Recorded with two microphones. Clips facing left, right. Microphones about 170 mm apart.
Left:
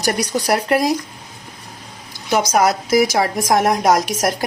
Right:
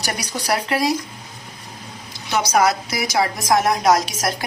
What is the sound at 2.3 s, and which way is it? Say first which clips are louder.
A woman's voice: left 2 dB; 50° left (ahead or behind).